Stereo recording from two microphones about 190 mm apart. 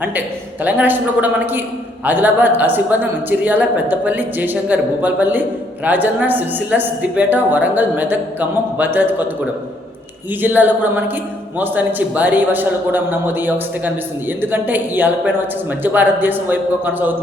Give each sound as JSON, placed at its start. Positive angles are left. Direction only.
{"t": 0.0, "sound": "a woman's voice", "side_deg": -10}
{"t": 10.4, "sound": "a woman's voice", "side_deg": -10}